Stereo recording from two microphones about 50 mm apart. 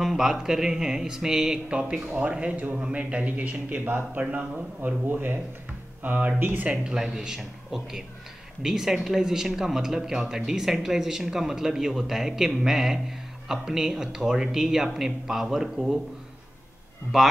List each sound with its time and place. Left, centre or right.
0.0 s speech: centre
1.7 s a man's voice: right
5.0 s speech: right
6.7 s speech: centre
17.1 s speech: centre